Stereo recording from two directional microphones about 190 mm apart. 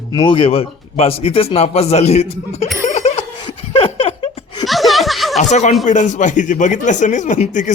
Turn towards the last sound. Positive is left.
turn(degrees=40)  # may be behind; listen again after turning